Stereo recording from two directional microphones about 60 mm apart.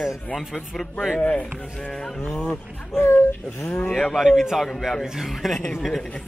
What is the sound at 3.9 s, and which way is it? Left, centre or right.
Speech, centre.